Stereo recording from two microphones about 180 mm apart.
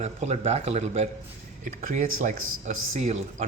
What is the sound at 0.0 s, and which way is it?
Speech, 35° right (ahead or behind).